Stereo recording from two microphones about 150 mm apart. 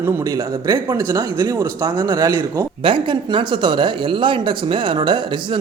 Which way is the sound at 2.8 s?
35° right (ahead or behind).